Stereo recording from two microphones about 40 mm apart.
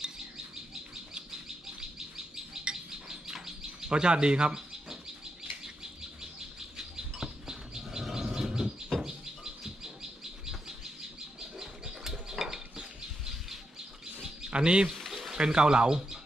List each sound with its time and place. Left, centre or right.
1.8 s bird: centre
6.7 s bird: centre
11.5 s a sound: centre
14.5 s speech: right
15.1 s a sound: centre
15.4 s speech: right